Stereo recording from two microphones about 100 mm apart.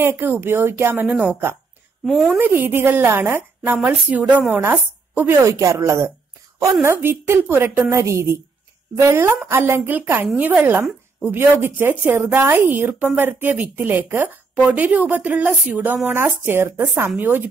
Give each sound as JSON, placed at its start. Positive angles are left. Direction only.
{"t": 0.0, "sound": "a woman's voice", "side_deg": -20}
{"t": 1.0, "sound": "a woman's voice", "side_deg": -10}
{"t": 12.0, "sound": "a woman's voice", "side_deg": -20}